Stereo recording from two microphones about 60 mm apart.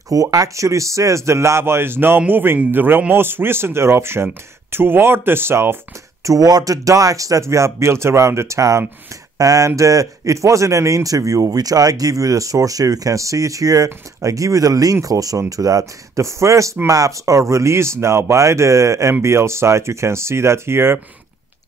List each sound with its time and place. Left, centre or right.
0.1 s speech: right
6.2 s speech: right
9.4 s speech: right
9.7 s speech: right